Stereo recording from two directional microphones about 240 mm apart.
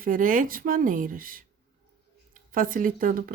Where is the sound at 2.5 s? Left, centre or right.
Right.